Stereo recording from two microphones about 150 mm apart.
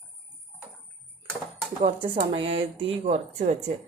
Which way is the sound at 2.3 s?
35° right (ahead or behind).